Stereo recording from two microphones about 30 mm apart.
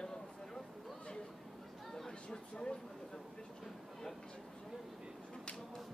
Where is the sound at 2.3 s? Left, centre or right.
Left.